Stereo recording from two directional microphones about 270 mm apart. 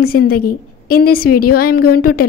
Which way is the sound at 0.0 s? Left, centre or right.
Left.